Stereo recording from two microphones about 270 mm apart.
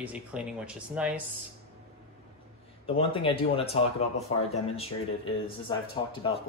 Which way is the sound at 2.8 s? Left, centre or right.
Centre.